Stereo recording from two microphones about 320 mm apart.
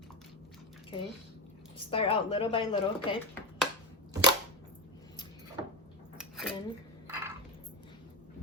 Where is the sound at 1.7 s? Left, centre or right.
Centre.